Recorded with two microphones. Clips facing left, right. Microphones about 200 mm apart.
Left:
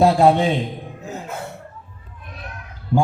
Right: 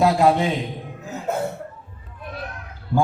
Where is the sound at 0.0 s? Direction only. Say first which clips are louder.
Left 3 dB; 30° left (ahead or behind).